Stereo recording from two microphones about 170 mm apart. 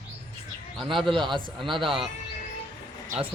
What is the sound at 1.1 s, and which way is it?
Speech, 30° right (ahead or behind).